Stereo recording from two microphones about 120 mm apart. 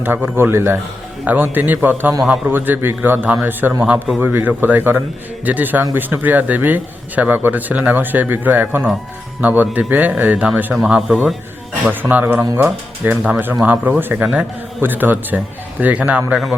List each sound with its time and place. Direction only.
0.0 s a man's voice: 15° right (ahead or behind)